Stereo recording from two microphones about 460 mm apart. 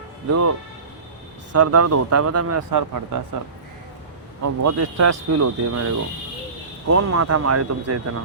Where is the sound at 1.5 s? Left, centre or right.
Right.